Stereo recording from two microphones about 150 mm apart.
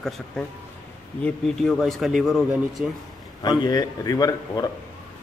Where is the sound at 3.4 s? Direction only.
25° left (ahead or behind).